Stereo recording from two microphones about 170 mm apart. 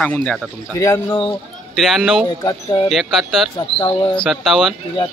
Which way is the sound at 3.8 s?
25° left (ahead or behind).